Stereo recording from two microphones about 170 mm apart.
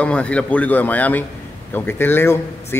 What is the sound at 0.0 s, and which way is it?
A man's voice, 5° left (ahead or behind).